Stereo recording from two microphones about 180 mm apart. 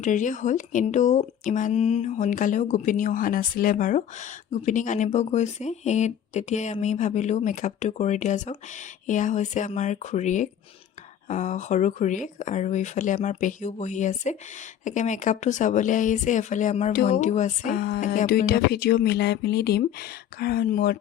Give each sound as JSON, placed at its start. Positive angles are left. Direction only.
{"t": 0.0, "sound": "speech", "side_deg": 45}